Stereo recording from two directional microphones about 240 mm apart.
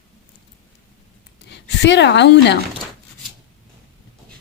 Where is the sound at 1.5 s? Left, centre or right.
Left.